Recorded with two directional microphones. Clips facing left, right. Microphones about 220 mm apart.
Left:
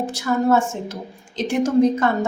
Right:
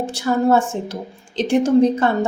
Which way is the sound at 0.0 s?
30° right (ahead or behind).